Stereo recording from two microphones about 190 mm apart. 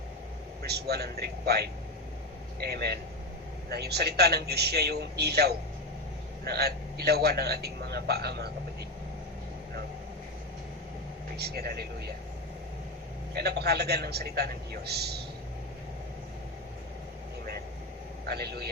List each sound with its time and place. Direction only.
0.6 s a man's voice: 60° right (ahead or behind)
11.3 s a man's voice: 55° right (ahead or behind)
13.3 s a man's voice: 60° right (ahead or behind)
18.3 s a man's voice: 55° right (ahead or behind)